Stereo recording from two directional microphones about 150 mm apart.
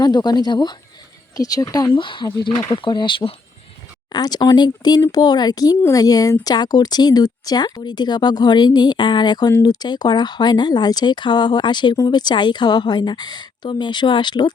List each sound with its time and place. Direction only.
0.0 s speech: 30° left (ahead or behind)